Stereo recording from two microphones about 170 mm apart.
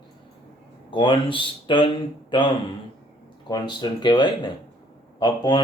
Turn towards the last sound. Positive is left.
turn(degrees=25)  # may be behind; listen again after turning